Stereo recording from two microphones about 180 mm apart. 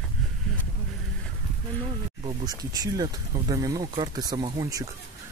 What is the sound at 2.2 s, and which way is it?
Speech, 20° right (ahead or behind).